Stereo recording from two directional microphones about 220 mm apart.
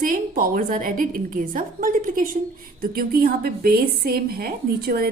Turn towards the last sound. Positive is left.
turn(degrees=-45)  # may be behind; listen again after turning